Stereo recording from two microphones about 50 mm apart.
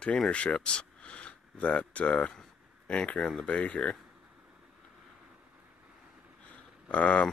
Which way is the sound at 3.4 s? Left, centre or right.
Left.